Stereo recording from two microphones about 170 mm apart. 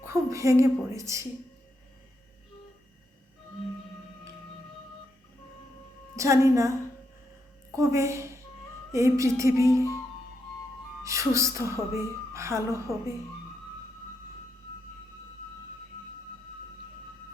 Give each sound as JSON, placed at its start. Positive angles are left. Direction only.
{"t": 0.0, "sound": "a woman's voice", "side_deg": -15}
{"t": 6.1, "sound": "a woman's voice", "side_deg": -15}
{"t": 11.0, "sound": "a woman's voice", "side_deg": -15}